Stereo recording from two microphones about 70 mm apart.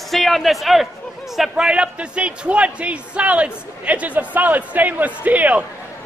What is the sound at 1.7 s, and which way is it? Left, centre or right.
A man's voice, centre.